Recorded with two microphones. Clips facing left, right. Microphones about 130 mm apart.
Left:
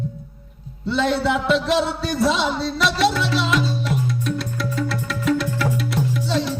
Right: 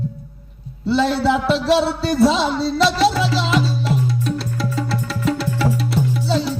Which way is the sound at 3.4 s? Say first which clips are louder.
Right 2 dB; 30° right (ahead or behind).